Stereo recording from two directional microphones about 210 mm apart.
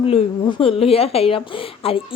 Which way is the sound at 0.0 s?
25° left (ahead or behind).